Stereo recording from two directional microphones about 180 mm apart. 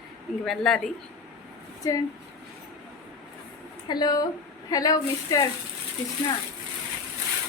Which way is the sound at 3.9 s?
20° left (ahead or behind).